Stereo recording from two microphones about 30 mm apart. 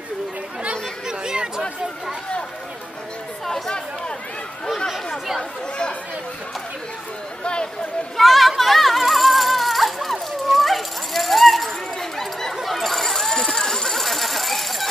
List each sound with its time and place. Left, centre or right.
1.0 s chatter: right
3.4 s chatter: centre
8.2 s a sound: centre